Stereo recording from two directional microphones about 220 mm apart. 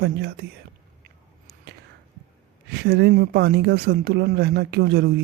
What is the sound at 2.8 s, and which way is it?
Speech, 45° right (ahead or behind).